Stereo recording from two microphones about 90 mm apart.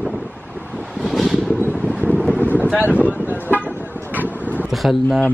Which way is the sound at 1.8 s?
15° right (ahead or behind).